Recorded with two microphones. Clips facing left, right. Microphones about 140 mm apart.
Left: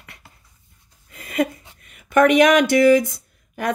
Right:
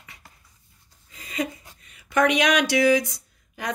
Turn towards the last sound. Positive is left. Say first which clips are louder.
# left 7 dB
turn(degrees=55)  # may be behind; listen again after turning